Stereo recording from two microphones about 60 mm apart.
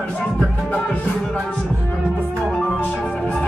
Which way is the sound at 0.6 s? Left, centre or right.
Centre.